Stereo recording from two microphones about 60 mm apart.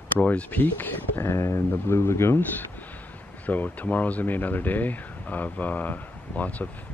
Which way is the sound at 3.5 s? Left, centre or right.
Left.